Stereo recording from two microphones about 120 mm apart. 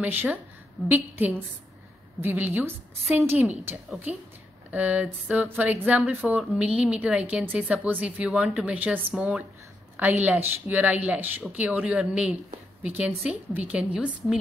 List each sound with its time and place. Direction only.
0.0 s a woman's voice: 15° right (ahead or behind)
5.9 s speech: 5° right (ahead or behind)
8.3 s speech: centre (ahead or behind)
8.7 s speech: 15° right (ahead or behind)